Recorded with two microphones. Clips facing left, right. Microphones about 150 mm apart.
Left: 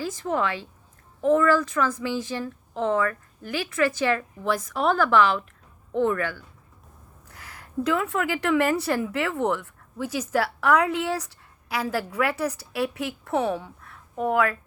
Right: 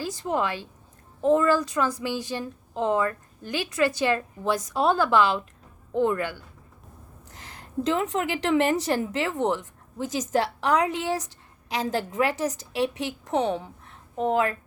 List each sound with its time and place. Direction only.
0.0 s a woman's voice: 15° right (ahead or behind)
7.3 s a sound: 30° right (ahead or behind)
7.9 s speech: 20° right (ahead or behind)